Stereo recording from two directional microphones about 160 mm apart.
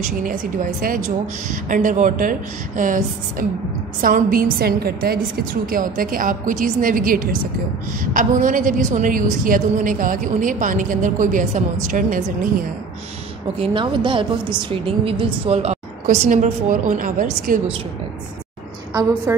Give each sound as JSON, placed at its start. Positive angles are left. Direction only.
{"t": 0.2, "sound": "a woman's voice", "side_deg": -60}
{"t": 13.6, "sound": "a woman's voice", "side_deg": -30}
{"t": 19.3, "sound": "a woman's voice", "side_deg": -15}